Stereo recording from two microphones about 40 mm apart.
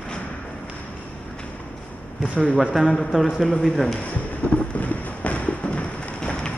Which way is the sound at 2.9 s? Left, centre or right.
Left.